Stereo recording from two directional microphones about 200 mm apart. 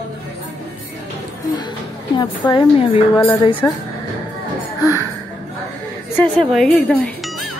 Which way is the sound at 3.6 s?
10° left (ahead or behind).